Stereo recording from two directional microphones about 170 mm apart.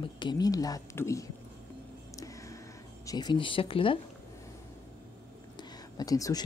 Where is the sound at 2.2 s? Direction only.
20° left (ahead or behind).